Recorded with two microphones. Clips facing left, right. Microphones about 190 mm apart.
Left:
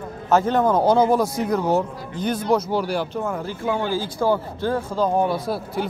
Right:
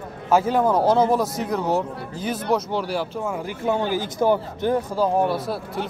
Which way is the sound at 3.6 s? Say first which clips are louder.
Right 1 dB; 20° right (ahead or behind).